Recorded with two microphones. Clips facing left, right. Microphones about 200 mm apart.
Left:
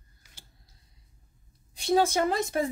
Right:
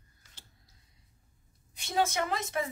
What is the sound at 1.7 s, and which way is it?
Speech, 35° left (ahead or behind).